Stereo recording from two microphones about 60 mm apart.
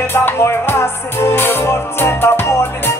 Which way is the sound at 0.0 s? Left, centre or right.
Left.